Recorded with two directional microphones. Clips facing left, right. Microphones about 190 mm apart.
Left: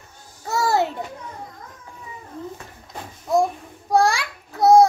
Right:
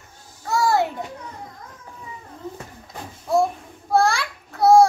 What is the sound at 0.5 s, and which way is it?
Music, 25° left (ahead or behind).